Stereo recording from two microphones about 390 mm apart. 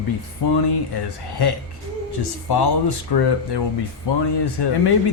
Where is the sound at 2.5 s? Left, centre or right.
Left.